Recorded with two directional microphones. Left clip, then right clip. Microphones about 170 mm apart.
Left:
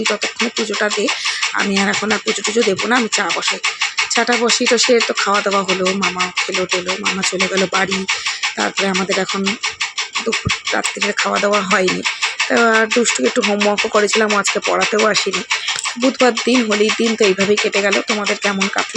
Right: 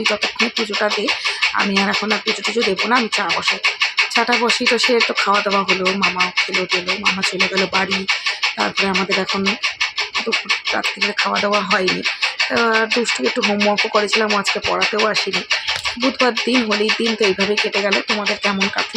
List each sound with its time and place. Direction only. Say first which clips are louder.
1.5 s music: even; 25° left (ahead or behind)
4.1 s music: left 4 dB; 20° left (ahead or behind)
11.4 s music: left 4 dB; 25° left (ahead or behind)
16.2 s music: left 3 dB; 20° left (ahead or behind)